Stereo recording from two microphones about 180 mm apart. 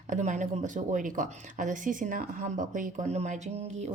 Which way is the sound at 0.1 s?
45° right (ahead or behind).